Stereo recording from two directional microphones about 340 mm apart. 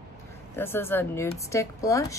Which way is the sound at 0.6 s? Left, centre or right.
Centre.